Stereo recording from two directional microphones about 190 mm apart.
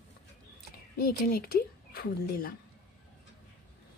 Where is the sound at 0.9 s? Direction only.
50° left (ahead or behind).